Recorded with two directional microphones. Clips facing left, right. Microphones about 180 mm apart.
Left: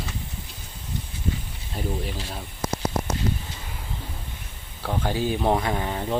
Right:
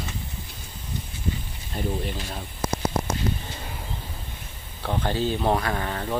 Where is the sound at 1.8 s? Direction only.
Centre (ahead or behind).